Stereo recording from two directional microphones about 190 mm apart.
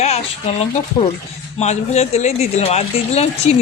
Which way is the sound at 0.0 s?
35° left (ahead or behind).